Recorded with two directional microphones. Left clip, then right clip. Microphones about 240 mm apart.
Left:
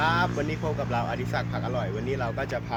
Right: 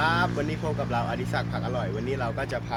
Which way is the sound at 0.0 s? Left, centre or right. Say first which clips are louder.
Even; centre.